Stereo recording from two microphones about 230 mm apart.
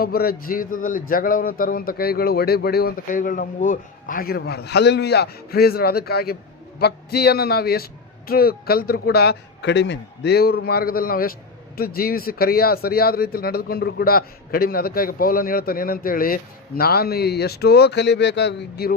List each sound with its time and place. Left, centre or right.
0.0 s a man's voice: left